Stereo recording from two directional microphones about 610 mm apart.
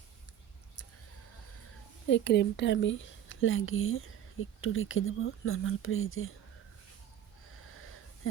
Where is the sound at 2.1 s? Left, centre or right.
Centre.